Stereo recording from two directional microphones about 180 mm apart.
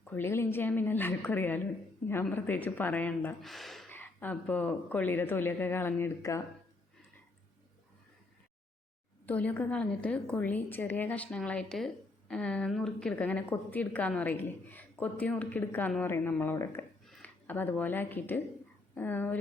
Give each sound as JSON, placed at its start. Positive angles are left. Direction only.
{"t": 0.0, "sound": "a woman's voice", "side_deg": 10}
{"t": 9.2, "sound": "a woman's voice", "side_deg": 10}